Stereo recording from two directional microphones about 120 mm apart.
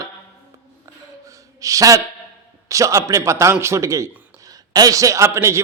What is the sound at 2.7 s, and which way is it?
A man's voice, 25° right (ahead or behind).